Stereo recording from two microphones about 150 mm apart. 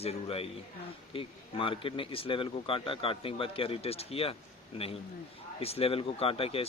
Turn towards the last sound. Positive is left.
turn(degrees=40)  # may be behind; listen again after turning